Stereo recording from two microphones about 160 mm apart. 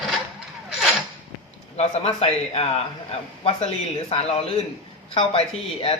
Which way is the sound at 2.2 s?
40° left (ahead or behind).